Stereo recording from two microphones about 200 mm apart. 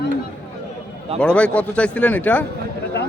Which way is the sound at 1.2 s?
5° left (ahead or behind).